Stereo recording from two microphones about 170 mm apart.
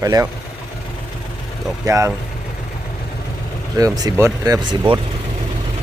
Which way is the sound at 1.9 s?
20° right (ahead or behind).